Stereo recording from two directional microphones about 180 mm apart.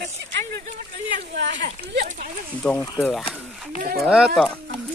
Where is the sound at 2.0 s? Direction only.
45° right (ahead or behind).